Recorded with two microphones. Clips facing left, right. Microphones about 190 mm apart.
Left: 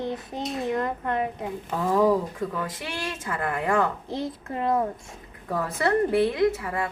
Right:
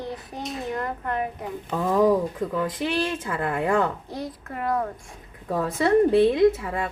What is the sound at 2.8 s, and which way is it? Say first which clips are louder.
A woman's voice: right 8 dB; 25° right (ahead or behind).